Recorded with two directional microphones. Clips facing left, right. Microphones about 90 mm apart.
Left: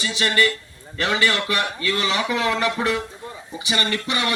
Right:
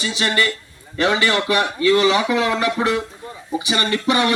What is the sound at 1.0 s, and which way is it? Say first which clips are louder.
A man's voice: right 3 dB; 20° right (ahead or behind).